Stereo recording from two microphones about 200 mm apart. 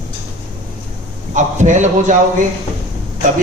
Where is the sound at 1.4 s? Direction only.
35° right (ahead or behind).